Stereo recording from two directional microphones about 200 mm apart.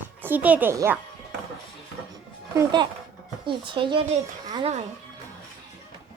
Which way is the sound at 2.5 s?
20° right (ahead or behind).